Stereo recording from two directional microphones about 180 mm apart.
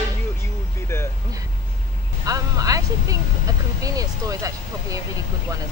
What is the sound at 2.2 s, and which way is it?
Speech, 20° right (ahead or behind).